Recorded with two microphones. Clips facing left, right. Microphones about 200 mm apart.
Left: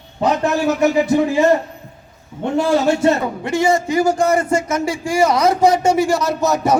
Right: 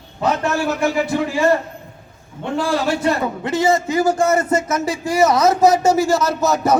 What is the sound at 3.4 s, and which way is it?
Speech, 20° right (ahead or behind).